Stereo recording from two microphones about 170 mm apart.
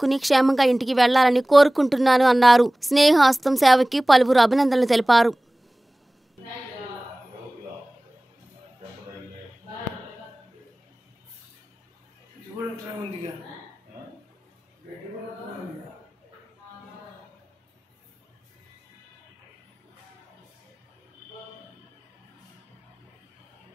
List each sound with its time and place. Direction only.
0.0 s a woman's voice: centre (ahead or behind)